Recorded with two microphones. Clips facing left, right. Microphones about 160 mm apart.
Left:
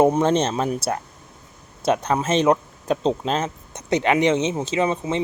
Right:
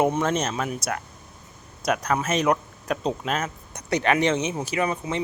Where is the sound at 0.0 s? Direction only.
30° left (ahead or behind).